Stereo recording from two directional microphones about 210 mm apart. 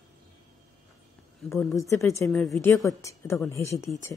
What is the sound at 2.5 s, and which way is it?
Speech, 15° left (ahead or behind).